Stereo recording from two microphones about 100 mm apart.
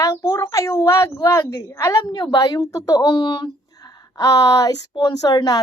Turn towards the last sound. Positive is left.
turn(degrees=45)  # may be behind; listen again after turning